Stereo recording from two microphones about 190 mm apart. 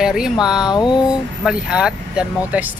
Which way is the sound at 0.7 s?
20° left (ahead or behind).